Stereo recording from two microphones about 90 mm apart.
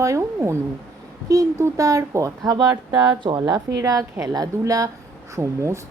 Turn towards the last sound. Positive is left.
turn(degrees=-30)  # may be behind; listen again after turning